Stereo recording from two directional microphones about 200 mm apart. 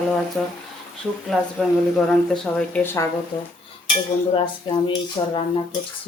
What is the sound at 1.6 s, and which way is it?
A woman's voice, centre (ahead or behind).